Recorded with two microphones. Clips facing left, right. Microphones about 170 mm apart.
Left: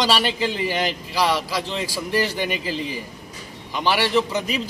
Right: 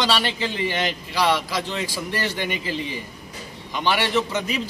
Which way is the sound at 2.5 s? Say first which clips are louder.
Left 1 dB; 40° left (ahead or behind).